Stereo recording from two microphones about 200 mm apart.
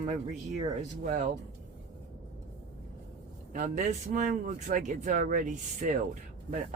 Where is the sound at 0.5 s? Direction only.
40° right (ahead or behind).